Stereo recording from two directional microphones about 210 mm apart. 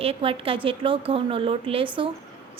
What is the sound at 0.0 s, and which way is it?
A woman's voice, 25° right (ahead or behind).